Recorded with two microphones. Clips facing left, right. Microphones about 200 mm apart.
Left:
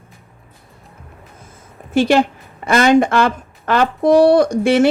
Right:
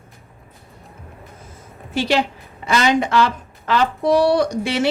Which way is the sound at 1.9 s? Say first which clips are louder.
Left 6 dB; 50° left (ahead or behind).